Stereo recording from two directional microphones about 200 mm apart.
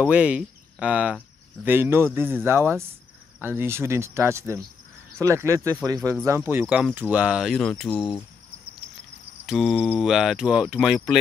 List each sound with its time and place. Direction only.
0.0 s speech: 5° right (ahead or behind)
9.5 s speech: centre (ahead or behind)